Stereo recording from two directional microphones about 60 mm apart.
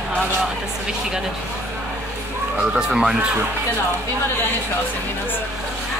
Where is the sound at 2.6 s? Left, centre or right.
Centre.